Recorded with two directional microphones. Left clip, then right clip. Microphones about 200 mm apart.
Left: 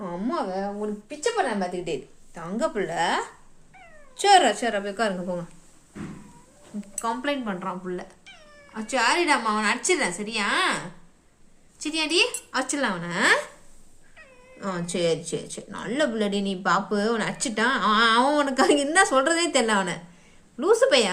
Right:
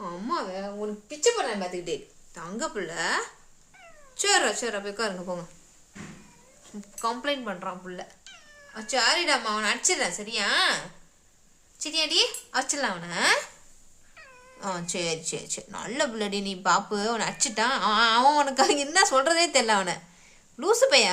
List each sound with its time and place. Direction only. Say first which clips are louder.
0.0 s speech: left 2 dB; 10° right (ahead or behind)
7.0 s a woman's voice: left 1 dB; 10° right (ahead or behind)
11.8 s a woman's voice: left 1 dB; 5° right (ahead or behind)
14.6 s a woman's voice: left 4 dB; 15° right (ahead or behind)